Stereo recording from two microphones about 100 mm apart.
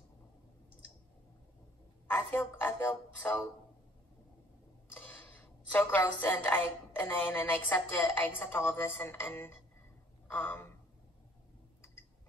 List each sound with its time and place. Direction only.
2.0 s music: 20° left (ahead or behind)
4.9 s a woman's voice: 20° left (ahead or behind)